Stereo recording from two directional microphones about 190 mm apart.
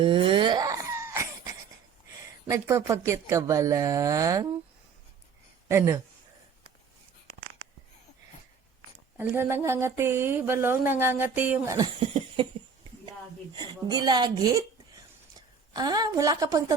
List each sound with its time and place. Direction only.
0.0 s a sound: 25° right (ahead or behind)
2.5 s speech: 15° right (ahead or behind)
5.6 s speech: 15° right (ahead or behind)
9.1 s speech: 10° right (ahead or behind)
11.9 s a sound: 30° right (ahead or behind)
13.6 s speech: 20° right (ahead or behind)
15.7 s speech: 20° right (ahead or behind)